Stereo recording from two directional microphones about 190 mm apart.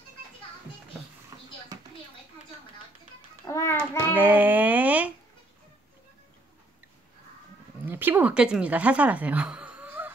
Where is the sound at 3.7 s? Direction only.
10° right (ahead or behind).